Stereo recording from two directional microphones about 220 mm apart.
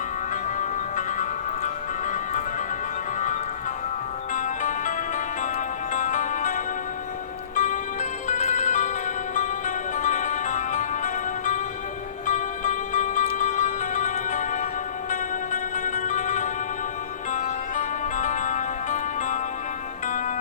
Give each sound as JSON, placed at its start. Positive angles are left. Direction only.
{"t": 0.6, "sound": "music", "side_deg": 35}
{"t": 4.4, "sound": "music", "side_deg": 35}